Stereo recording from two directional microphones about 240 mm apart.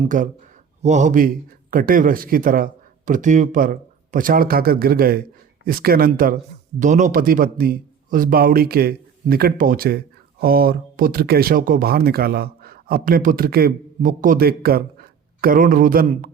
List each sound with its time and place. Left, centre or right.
0.1 s speech: right